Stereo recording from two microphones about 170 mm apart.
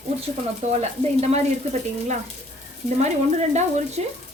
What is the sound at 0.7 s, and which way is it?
Speech, 40° right (ahead or behind).